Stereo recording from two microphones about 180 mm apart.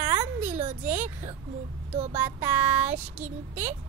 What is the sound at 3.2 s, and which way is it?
Speech, 45° right (ahead or behind).